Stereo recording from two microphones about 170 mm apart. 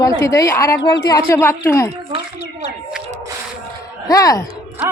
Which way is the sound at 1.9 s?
30° right (ahead or behind).